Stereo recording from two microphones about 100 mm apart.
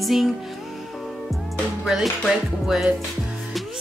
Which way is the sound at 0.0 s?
Centre (ahead or behind).